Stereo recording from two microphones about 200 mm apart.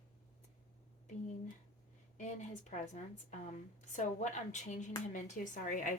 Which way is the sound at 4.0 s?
35° left (ahead or behind).